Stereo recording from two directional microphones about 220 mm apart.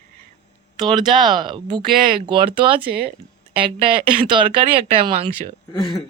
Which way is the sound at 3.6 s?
25° right (ahead or behind).